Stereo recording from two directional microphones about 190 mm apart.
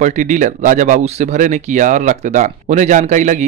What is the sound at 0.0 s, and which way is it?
Speech, 40° right (ahead or behind).